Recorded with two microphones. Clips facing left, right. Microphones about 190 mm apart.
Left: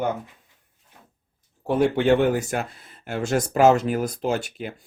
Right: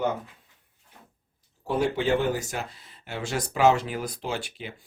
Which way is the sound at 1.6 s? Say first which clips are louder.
Left 6 dB; 55° left (ahead or behind).